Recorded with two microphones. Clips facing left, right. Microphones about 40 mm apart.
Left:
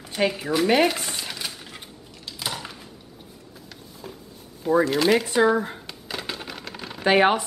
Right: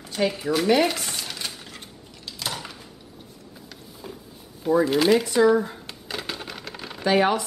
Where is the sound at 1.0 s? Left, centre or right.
Centre.